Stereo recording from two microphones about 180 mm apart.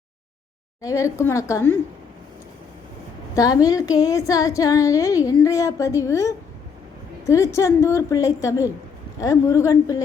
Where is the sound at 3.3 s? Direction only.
20° left (ahead or behind).